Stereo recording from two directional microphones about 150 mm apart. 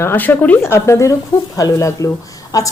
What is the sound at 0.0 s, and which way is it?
A woman's voice, 15° left (ahead or behind).